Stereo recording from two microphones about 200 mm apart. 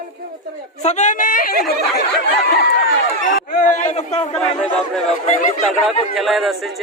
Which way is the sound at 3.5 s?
40° left (ahead or behind).